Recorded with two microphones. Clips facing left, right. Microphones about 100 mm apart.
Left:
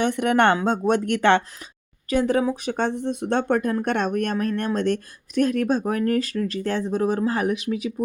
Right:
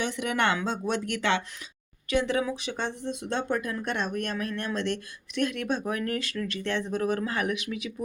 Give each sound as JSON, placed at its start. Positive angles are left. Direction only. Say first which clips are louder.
{"t": 0.0, "sound": "speech", "louder": "left 8 dB", "side_deg": 50}
{"t": 2.0, "sound": "speech", "louder": "left 5 dB", "side_deg": 45}